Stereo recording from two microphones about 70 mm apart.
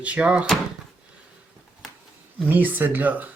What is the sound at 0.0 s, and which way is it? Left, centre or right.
Speech, centre.